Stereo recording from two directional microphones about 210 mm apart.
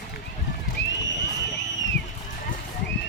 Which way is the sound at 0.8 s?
60° left (ahead or behind).